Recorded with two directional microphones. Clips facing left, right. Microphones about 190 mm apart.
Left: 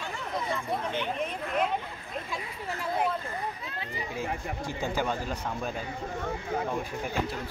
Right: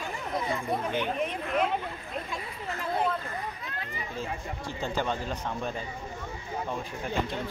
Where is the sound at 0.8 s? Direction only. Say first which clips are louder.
Right 2 dB; 15° right (ahead or behind).